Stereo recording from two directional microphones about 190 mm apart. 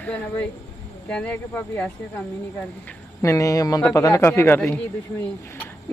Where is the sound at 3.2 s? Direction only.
15° left (ahead or behind).